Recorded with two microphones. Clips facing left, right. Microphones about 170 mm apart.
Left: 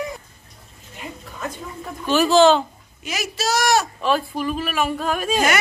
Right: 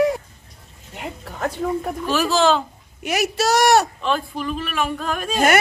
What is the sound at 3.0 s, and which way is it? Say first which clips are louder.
Speech: right 5 dB; 65° right (ahead or behind).